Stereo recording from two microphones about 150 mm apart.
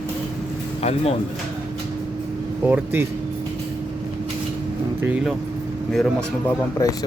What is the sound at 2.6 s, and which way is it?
Speech, 15° right (ahead or behind).